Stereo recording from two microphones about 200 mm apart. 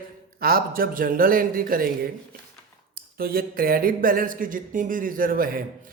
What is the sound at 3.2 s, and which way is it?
Speech, 50° right (ahead or behind).